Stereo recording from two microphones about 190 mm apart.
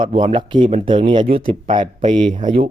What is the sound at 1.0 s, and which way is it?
Speech, 25° right (ahead or behind).